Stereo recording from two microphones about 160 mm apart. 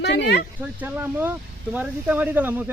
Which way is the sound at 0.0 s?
90° left.